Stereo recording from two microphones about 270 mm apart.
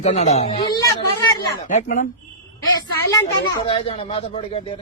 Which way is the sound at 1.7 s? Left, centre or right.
Left.